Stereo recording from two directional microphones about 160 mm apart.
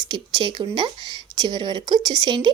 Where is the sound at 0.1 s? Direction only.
30° right (ahead or behind).